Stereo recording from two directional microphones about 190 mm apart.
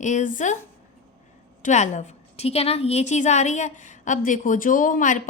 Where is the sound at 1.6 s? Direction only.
40° left (ahead or behind).